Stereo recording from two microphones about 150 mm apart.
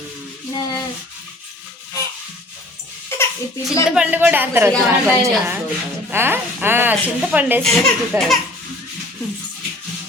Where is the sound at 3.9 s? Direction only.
10° right (ahead or behind).